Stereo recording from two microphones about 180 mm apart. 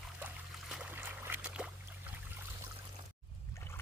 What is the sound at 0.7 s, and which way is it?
Boat, 5° right (ahead or behind).